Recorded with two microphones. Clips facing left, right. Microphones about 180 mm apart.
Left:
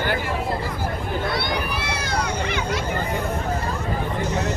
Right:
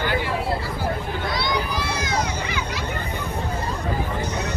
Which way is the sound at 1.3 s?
60° left (ahead or behind).